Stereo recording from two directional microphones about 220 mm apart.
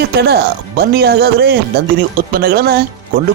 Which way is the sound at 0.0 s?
45° right (ahead or behind).